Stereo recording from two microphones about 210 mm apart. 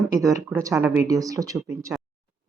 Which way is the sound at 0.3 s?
15° right (ahead or behind).